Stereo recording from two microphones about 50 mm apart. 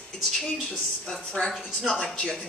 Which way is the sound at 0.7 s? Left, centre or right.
Centre.